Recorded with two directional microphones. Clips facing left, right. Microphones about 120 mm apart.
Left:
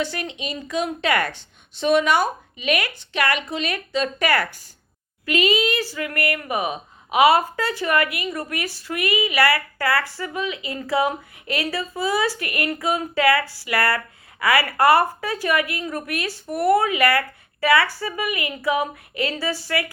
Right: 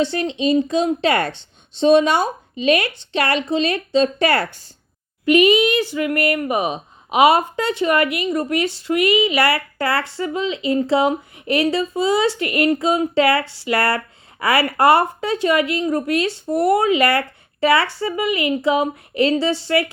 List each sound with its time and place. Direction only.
0.0 s speech: 25° right (ahead or behind)